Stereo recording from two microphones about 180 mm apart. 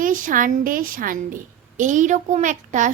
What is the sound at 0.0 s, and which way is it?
A child's voice, 50° right (ahead or behind).